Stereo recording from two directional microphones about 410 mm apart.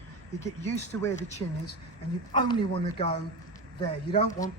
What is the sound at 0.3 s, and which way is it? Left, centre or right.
Speech, centre.